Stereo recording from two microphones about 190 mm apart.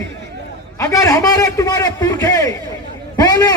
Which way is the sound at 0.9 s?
20° left (ahead or behind).